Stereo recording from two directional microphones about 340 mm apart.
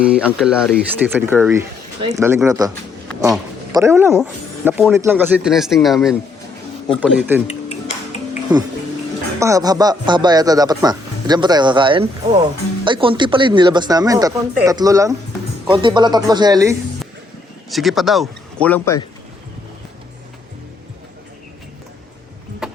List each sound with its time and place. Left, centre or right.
0.0 s speech: centre
7.7 s music: centre
9.4 s speech: centre
17.7 s speech: centre
22.6 s a sound: centre